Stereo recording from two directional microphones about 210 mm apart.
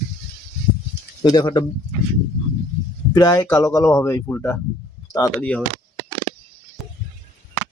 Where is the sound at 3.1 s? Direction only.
20° left (ahead or behind).